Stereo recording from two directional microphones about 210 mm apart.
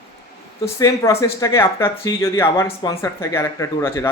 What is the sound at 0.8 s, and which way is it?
Speech, 15° left (ahead or behind).